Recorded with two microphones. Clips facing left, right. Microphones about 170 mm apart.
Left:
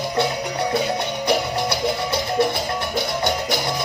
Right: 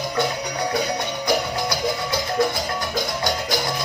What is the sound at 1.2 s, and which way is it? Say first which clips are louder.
Music: left 1 dB; 25° left (ahead or behind).